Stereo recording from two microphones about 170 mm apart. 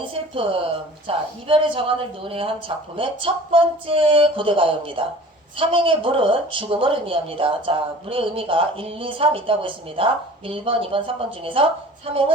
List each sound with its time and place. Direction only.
0.0 s a woman's voice: 30° right (ahead or behind)